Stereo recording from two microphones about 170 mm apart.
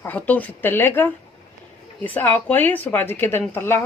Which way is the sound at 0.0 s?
10° left (ahead or behind).